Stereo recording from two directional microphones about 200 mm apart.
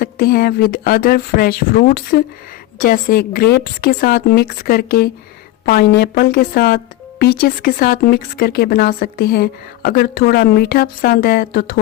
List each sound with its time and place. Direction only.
0.0 s a woman's voice: 50° left (ahead or behind)